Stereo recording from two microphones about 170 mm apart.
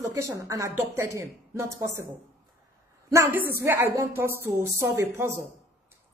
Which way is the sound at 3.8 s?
15° right (ahead or behind).